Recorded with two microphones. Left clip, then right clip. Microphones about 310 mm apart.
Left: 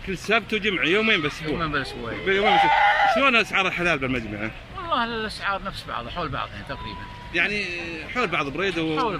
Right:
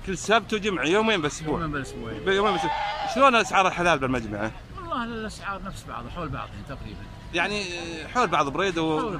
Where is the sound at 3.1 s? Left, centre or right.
Centre.